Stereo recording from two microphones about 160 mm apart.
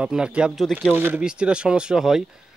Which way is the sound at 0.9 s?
10° right (ahead or behind).